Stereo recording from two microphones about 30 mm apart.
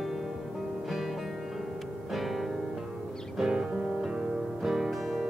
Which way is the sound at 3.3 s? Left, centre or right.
Centre.